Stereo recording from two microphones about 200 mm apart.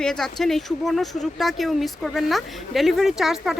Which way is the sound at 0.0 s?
5° left (ahead or behind).